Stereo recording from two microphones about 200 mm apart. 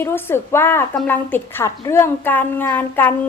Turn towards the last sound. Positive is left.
turn(degrees=10)  # may be behind; listen again after turning